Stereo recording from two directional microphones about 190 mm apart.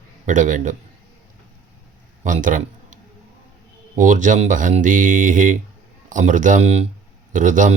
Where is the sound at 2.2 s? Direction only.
45° right (ahead or behind).